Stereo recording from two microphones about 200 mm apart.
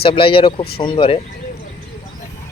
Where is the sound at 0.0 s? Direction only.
25° left (ahead or behind).